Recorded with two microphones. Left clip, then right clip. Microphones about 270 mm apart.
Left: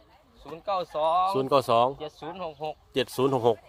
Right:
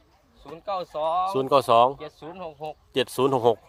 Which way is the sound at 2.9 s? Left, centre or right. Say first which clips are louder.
Right 3 dB; centre.